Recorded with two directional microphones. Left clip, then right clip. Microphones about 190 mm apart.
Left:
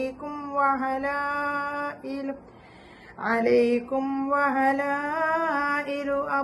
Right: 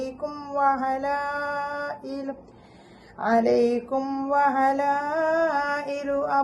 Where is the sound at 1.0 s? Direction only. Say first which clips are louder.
Even; 20° right (ahead or behind).